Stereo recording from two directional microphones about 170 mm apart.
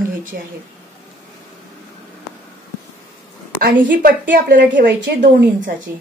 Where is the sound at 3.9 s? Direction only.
65° right (ahead or behind).